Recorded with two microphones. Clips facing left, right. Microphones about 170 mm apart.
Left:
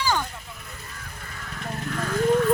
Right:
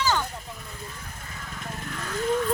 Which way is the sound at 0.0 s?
10° left (ahead or behind).